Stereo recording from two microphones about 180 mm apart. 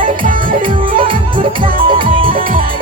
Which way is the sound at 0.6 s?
30° right (ahead or behind).